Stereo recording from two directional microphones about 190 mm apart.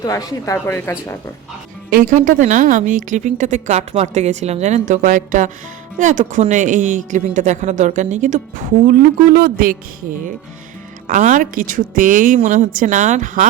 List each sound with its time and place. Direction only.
0.0 s speech: 20° left (ahead or behind)
1.9 s speech: 40° right (ahead or behind)
11.0 s a woman's voice: 40° right (ahead or behind)